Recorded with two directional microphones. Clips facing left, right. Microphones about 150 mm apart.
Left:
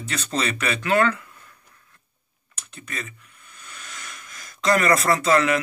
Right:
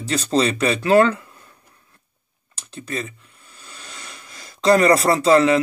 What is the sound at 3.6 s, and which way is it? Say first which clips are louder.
Speech: right 1 dB; 30° right (ahead or behind).